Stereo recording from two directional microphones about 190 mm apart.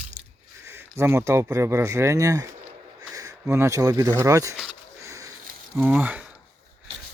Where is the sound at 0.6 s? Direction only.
15° right (ahead or behind).